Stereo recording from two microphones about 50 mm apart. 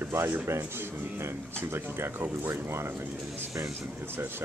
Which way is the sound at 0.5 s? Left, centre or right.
Right.